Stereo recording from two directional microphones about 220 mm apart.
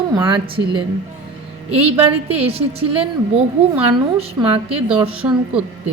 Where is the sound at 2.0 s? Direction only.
25° right (ahead or behind).